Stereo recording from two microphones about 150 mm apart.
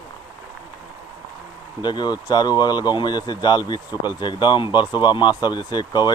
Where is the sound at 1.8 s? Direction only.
30° left (ahead or behind).